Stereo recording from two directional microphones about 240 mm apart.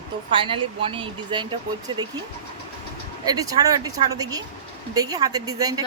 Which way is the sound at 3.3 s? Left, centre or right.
Centre.